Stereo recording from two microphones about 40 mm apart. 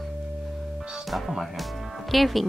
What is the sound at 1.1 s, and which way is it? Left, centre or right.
Speech, centre.